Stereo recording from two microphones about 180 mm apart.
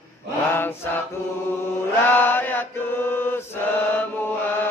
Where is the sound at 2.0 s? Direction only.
10° left (ahead or behind).